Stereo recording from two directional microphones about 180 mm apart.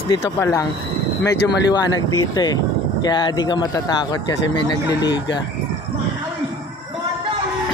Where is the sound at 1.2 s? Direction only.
70° left (ahead or behind).